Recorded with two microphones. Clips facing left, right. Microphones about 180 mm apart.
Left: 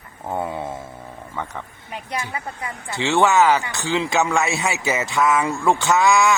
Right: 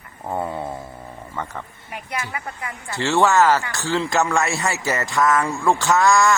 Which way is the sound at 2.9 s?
Centre (ahead or behind).